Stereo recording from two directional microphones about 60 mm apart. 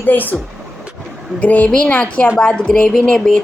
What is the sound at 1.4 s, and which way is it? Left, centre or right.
Speech, left.